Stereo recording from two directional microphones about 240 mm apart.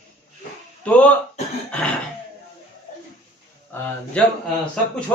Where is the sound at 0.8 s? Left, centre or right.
Centre.